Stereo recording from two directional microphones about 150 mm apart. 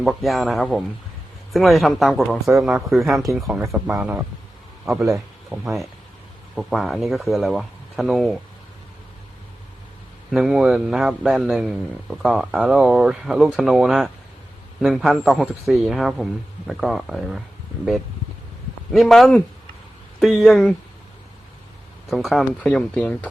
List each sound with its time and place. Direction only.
0.0 s a man's voice: centre (ahead or behind)
3.6 s a man's voice: 20° right (ahead or behind); by 8.4 s centre (ahead or behind)
10.3 s a man's voice: 5° right (ahead or behind)
18.9 s a man's voice: centre (ahead or behind)
22.1 s a man's voice: centre (ahead or behind)